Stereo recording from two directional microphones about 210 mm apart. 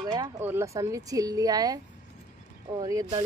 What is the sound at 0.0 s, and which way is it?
Speech, 15° right (ahead or behind).